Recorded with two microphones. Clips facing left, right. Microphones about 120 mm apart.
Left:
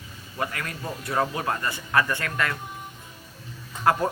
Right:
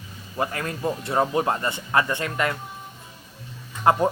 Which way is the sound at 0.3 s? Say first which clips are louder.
Right 4 dB; 30° right (ahead or behind).